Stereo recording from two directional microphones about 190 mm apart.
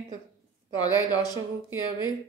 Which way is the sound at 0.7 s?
20° left (ahead or behind).